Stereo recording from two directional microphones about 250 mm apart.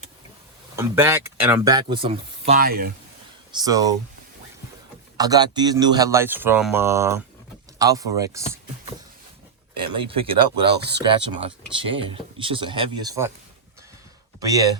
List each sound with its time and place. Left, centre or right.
0.8 s a man's voice: centre
2.5 s speech: right
3.5 s a man's voice: centre
5.1 s a man's voice: centre
9.7 s speech: right
14.3 s speech: centre